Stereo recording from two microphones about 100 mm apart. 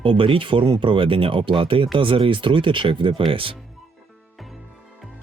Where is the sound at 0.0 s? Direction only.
55° right (ahead or behind).